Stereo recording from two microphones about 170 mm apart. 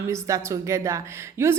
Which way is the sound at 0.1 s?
15° right (ahead or behind).